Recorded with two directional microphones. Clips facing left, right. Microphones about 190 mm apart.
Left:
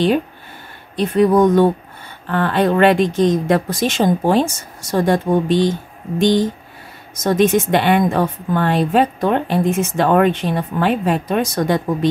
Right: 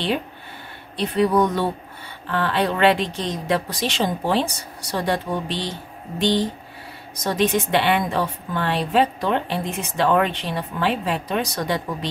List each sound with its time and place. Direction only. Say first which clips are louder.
0.9 s a woman's voice: left 5 dB; 50° left (ahead or behind)